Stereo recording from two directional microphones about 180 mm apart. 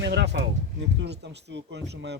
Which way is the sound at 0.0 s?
75° right (ahead or behind).